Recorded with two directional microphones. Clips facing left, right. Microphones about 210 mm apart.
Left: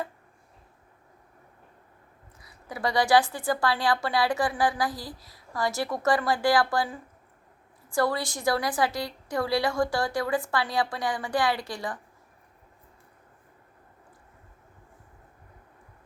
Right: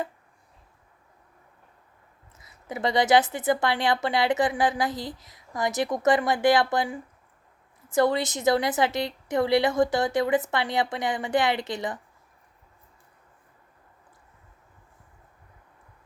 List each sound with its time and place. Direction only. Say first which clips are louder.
2.4 s a woman's voice: right 2 dB; 20° right (ahead or behind)